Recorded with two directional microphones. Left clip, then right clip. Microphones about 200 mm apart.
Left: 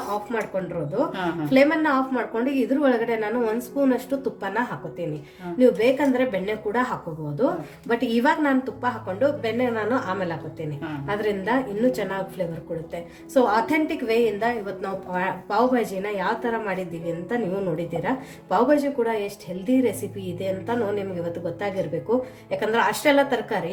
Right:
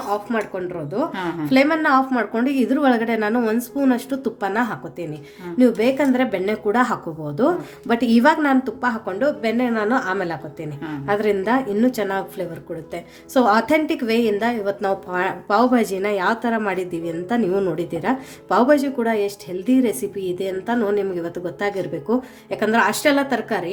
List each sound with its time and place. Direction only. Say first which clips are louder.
1.5 s a woman's voice: right 2 dB; 50° right (ahead or behind)
7.9 s a woman's voice: right 5 dB; 50° right (ahead or behind)
13.3 s a woman's voice: right 4 dB; 50° right (ahead or behind)
18.0 s a woman's voice: right 4 dB; 50° right (ahead or behind)
22.4 s a woman's voice: right 4 dB; 50° right (ahead or behind)